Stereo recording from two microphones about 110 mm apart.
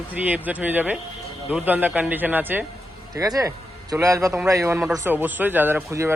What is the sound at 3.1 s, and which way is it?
A man's voice, 35° right (ahead or behind).